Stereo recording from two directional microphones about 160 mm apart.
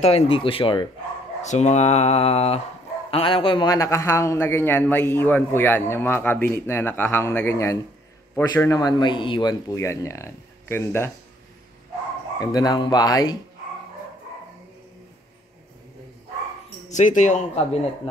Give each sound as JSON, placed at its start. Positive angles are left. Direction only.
{"t": 0.0, "sound": "speech", "side_deg": 40}
{"t": 1.4, "sound": "a man's voice", "side_deg": 45}
{"t": 12.4, "sound": "speech", "side_deg": 25}
{"t": 16.9, "sound": "speech", "side_deg": 50}